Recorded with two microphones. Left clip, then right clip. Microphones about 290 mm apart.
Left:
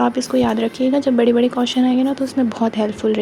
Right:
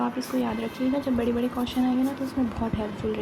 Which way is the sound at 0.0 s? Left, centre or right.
Right.